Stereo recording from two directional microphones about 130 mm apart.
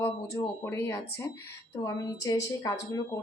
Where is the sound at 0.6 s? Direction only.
20° left (ahead or behind).